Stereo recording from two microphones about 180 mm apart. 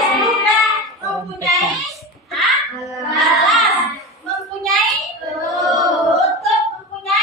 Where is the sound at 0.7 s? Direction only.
Centre (ahead or behind).